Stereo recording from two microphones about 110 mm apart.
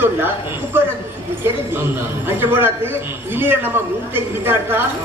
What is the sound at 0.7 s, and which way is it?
A man's voice, 20° right (ahead or behind).